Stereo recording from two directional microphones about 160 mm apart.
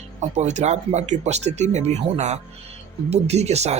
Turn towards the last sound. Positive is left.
turn(degrees=-45)  # may be behind; listen again after turning